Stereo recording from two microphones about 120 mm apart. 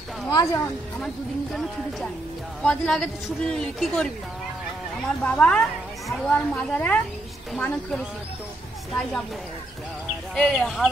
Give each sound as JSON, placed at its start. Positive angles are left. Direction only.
{"t": 0.3, "sound": "speech", "side_deg": 35}
{"t": 1.0, "sound": "speech", "side_deg": 0}
{"t": 5.2, "sound": "speech", "side_deg": 10}
{"t": 10.3, "sound": "speech", "side_deg": 5}